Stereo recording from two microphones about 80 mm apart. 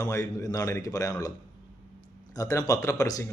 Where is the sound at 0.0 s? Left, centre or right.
Left.